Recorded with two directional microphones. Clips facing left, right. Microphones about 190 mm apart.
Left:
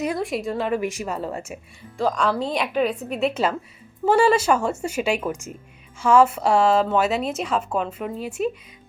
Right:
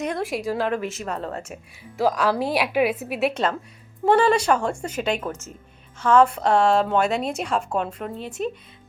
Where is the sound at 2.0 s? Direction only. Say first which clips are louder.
Right 1 dB; 5° right (ahead or behind).